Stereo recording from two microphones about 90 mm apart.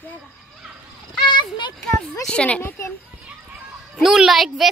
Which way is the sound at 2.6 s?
25° left (ahead or behind).